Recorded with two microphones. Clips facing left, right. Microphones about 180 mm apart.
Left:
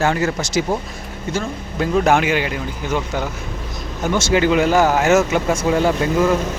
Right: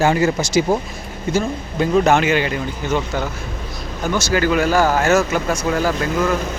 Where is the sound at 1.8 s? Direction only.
5° left (ahead or behind).